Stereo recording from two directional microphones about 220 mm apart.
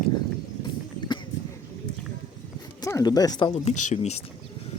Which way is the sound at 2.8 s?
15° left (ahead or behind).